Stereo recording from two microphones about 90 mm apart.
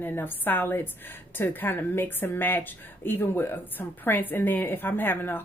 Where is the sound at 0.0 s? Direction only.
20° left (ahead or behind).